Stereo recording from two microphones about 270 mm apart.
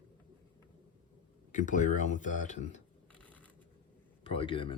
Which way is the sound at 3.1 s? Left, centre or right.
Centre.